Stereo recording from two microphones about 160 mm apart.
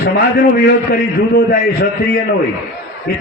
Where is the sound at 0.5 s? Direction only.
80° left.